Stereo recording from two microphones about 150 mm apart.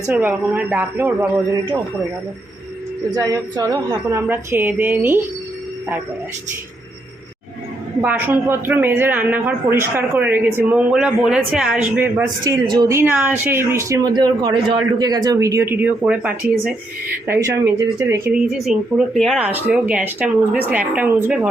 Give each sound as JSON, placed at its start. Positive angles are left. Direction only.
{"t": 0.2, "sound": "speech", "side_deg": -10}
{"t": 3.2, "sound": "speech", "side_deg": -25}
{"t": 8.0, "sound": "speech", "side_deg": -15}
{"t": 12.5, "sound": "a man's voice", "side_deg": -25}
{"t": 13.0, "sound": "a man's voice", "side_deg": -15}
{"t": 18.5, "sound": "speech", "side_deg": 0}
{"t": 19.5, "sound": "speech", "side_deg": -10}